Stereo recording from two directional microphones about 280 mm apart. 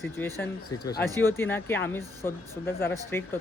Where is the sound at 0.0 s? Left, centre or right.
Centre.